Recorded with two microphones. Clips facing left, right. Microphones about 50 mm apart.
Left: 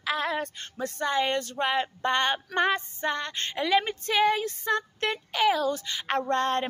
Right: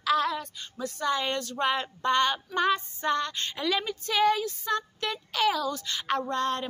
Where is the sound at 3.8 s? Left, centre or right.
Left.